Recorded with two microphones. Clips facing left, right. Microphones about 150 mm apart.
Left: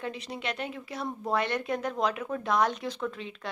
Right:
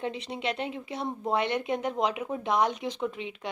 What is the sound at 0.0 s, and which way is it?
Speech, 25° right (ahead or behind).